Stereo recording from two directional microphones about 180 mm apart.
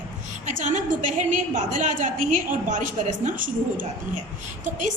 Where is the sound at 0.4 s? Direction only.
45° right (ahead or behind).